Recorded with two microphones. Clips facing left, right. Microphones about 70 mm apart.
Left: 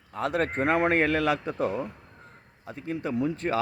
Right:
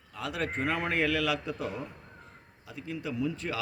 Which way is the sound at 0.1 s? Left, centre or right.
Left.